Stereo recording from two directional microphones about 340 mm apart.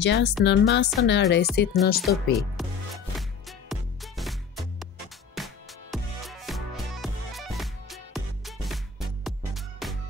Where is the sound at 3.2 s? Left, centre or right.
Centre.